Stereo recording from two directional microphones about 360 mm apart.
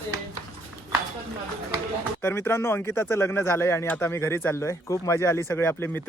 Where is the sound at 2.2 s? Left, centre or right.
Centre.